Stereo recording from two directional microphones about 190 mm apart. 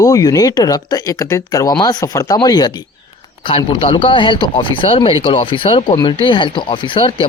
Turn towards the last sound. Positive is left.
turn(degrees=30)  # may be behind; listen again after turning